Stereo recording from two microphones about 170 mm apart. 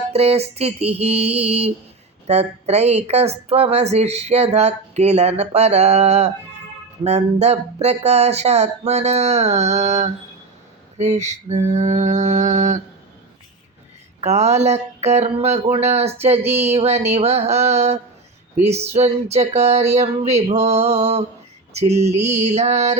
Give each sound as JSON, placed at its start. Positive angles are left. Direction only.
{"t": 0.1, "sound": "a woman's voice", "side_deg": -35}
{"t": 10.9, "sound": "mantra", "side_deg": -40}
{"t": 14.2, "sound": "a woman's voice", "side_deg": -40}
{"t": 16.4, "sound": "a sound", "side_deg": -15}
{"t": 16.7, "sound": "a woman's voice", "side_deg": -40}
{"t": 21.7, "sound": "a sound", "side_deg": -40}
{"t": 22.0, "sound": "a woman's voice", "side_deg": -40}